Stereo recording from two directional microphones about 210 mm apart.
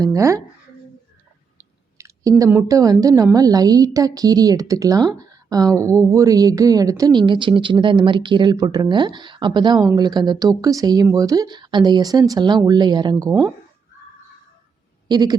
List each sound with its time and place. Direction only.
0.0 s a woman's voice: 15° right (ahead or behind)
2.0 s a sound: 15° right (ahead or behind)
2.4 s a woman's voice: 15° right (ahead or behind)
15.0 s speech: 20° right (ahead or behind)